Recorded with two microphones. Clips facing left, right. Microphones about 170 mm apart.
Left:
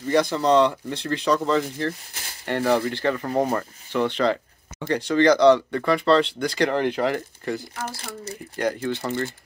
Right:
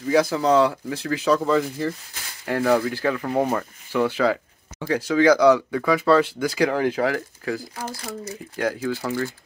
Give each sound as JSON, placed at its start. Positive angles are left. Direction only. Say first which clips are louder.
{"t": 0.0, "sound": "speech", "louder": "right 1 dB", "side_deg": -5}
{"t": 7.9, "sound": "speech", "louder": "right 3 dB", "side_deg": 25}
{"t": 8.5, "sound": "speech", "louder": "even", "side_deg": 0}